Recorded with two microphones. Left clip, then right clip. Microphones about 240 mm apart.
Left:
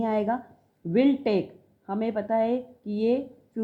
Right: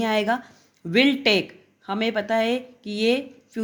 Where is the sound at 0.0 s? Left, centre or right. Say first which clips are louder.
Right 4 dB; right.